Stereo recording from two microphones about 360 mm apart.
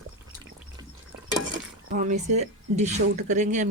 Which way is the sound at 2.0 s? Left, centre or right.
Centre.